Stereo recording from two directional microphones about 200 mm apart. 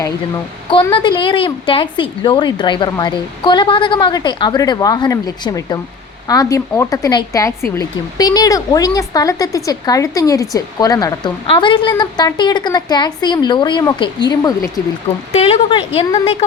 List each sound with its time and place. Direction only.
0.7 s a woman's voice: 25° left (ahead or behind)